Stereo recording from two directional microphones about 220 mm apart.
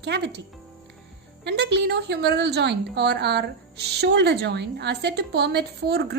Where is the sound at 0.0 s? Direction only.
50° right (ahead or behind).